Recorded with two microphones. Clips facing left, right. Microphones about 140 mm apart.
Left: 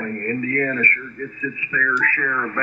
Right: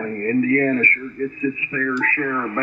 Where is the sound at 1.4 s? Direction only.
30° right (ahead or behind).